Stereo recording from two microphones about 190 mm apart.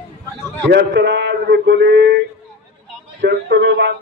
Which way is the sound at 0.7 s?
65° right (ahead or behind).